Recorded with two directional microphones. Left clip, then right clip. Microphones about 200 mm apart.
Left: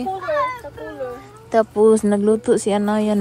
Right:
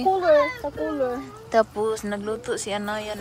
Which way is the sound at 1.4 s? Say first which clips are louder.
Left 7 dB; centre (ahead or behind).